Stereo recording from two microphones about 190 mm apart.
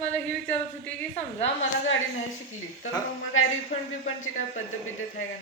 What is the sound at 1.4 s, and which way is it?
Speech, 90° left.